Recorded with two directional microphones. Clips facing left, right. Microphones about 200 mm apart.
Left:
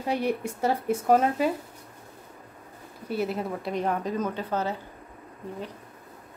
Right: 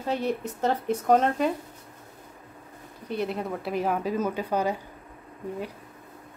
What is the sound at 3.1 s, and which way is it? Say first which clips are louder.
A woman's voice: left 1 dB; 5° left (ahead or behind).